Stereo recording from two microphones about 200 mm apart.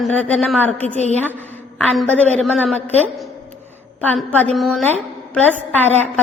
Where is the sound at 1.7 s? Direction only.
Centre (ahead or behind).